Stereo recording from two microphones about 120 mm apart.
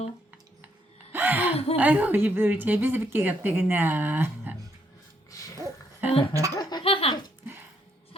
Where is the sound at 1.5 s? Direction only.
55° left (ahead or behind).